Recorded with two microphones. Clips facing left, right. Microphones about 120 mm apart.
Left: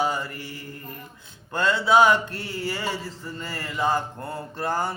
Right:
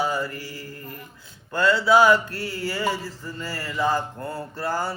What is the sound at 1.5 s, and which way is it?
Mantra, 25° left (ahead or behind).